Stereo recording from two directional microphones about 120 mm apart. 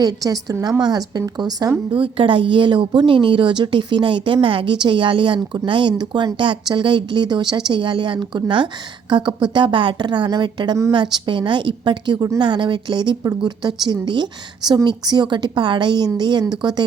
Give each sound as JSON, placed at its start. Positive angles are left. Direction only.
{"t": 0.0, "sound": "a woman's voice", "side_deg": -30}
{"t": 1.9, "sound": "a woman's voice", "side_deg": -45}